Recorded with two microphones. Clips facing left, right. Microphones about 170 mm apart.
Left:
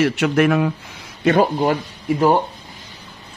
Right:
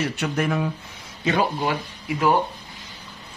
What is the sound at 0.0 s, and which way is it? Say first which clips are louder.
Speech: left 8 dB; 90° left.